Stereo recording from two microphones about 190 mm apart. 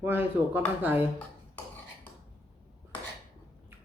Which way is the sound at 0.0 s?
10° right (ahead or behind).